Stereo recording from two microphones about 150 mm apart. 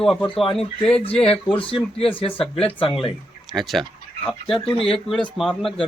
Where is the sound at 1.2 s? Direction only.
40° left (ahead or behind).